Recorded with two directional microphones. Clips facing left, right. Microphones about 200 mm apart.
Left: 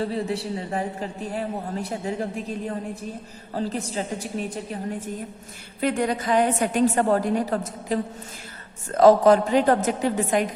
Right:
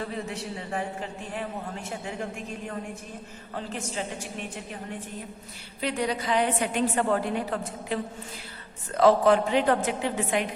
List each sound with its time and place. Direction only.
0.0 s a man's voice: 35° left (ahead or behind)
5.8 s a woman's voice: 50° left (ahead or behind)